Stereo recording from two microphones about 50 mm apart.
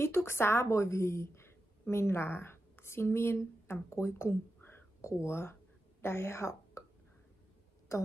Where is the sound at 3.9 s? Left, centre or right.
Left.